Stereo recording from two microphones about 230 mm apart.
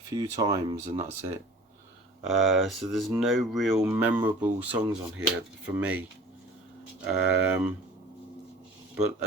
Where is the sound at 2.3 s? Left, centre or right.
Centre.